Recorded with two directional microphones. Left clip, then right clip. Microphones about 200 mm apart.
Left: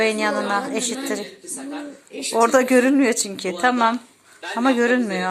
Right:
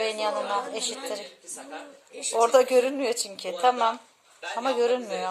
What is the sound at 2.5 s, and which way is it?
Speech, 40° left (ahead or behind).